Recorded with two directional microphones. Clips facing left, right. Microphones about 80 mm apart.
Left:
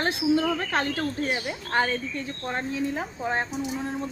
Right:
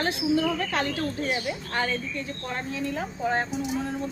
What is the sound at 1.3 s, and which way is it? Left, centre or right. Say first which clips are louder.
Speech: left 2 dB; left.